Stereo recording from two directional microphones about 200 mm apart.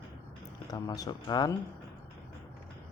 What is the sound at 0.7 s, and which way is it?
Speech, 20° left (ahead or behind).